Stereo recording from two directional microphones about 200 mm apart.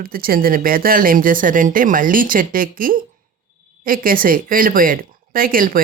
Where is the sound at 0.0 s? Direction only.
45° right (ahead or behind).